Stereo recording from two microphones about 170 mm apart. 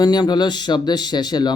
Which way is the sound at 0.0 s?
25° left (ahead or behind).